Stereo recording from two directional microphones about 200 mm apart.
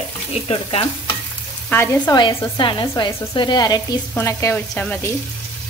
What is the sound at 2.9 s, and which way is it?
Speech, 20° left (ahead or behind).